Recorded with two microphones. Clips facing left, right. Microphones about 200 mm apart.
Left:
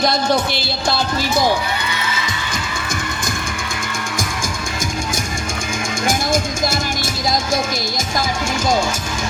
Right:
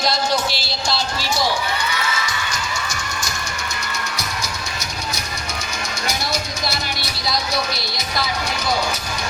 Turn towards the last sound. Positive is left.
turn(degrees=50)  # may be behind; listen again after turning